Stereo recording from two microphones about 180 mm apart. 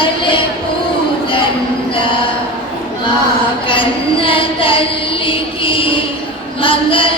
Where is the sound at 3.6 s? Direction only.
30° left (ahead or behind).